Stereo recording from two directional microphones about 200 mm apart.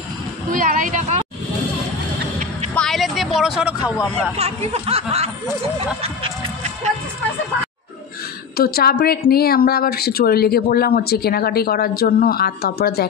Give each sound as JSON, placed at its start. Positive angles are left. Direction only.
{"t": 0.5, "sound": "speech", "side_deg": -40}
{"t": 2.7, "sound": "vehicle", "side_deg": 0}
{"t": 4.4, "sound": "speech", "side_deg": -30}
{"t": 8.5, "sound": "a woman's voice", "side_deg": 50}